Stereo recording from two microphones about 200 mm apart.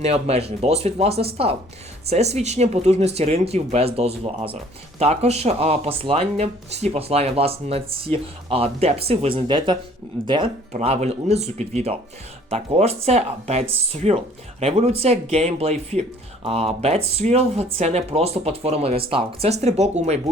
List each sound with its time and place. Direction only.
0.0 s speech: 30° right (ahead or behind)